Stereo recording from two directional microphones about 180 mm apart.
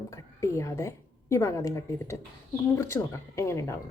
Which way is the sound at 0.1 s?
15° left (ahead or behind).